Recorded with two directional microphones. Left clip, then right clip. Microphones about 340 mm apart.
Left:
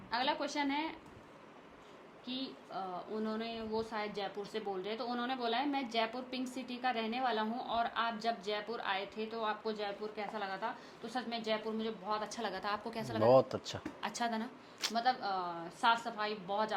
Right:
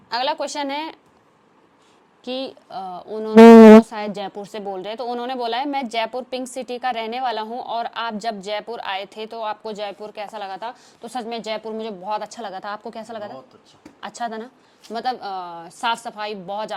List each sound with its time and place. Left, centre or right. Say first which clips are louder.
0.1 s a woman's voice: right 12 dB; right
2.2 s a woman's voice: right 15 dB; right
3.9 s a woman's voice: right 11 dB; right